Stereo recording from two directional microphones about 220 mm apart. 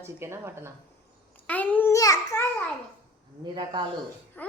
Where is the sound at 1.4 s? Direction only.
10° left (ahead or behind).